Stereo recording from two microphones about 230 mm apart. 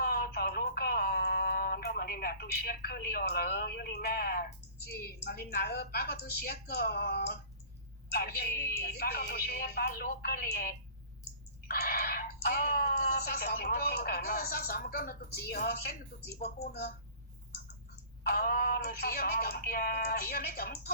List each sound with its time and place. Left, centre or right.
0.0 s speech: left
18.2 s speech: left